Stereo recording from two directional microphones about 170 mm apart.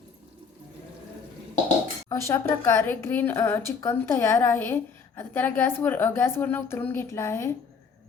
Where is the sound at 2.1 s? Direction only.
15° left (ahead or behind).